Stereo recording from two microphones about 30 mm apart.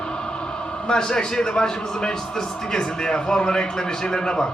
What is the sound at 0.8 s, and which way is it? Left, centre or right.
A man's voice, left.